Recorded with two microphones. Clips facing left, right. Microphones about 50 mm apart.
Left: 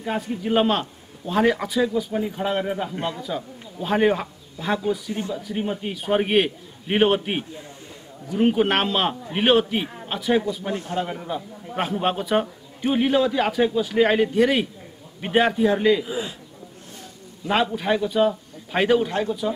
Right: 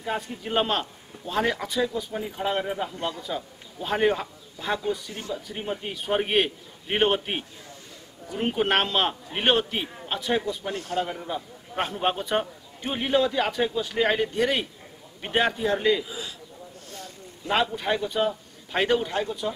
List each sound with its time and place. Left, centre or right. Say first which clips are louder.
0.0 s a man's voice: left 4 dB; centre
10.7 s a man's voice: left 3 dB; left
11.0 s a man's voice: left 2 dB; centre
16.1 s a man's voice: left 8 dB; left
17.7 s a man's voice: left 5 dB; centre